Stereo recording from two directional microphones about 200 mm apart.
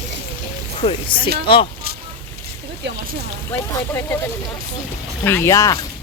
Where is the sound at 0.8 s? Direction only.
25° left (ahead or behind).